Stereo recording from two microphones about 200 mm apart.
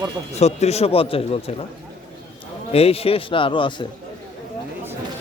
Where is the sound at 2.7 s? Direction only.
30° left (ahead or behind).